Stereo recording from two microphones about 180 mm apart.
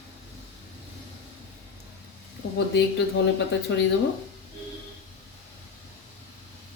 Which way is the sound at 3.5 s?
75° left (ahead or behind).